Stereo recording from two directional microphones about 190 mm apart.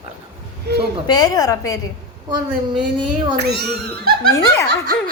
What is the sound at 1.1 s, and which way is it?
Speech, 20° left (ahead or behind).